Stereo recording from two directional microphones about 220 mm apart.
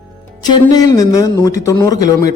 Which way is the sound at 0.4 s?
20° left (ahead or behind).